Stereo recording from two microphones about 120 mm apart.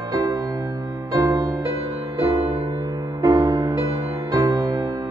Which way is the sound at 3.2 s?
35° right (ahead or behind).